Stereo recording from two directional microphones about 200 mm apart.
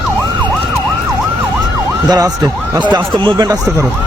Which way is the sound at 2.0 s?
20° right (ahead or behind).